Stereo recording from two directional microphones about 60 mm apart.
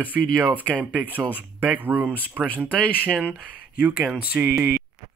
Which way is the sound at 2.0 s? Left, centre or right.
Left.